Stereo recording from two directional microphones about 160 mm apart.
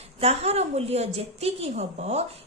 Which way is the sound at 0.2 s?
40° right (ahead or behind).